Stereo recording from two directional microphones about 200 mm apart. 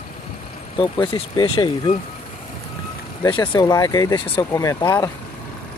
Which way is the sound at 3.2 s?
20° left (ahead or behind).